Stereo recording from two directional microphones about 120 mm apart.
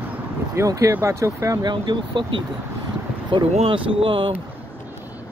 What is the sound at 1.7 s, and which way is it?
Speech, 40° right (ahead or behind).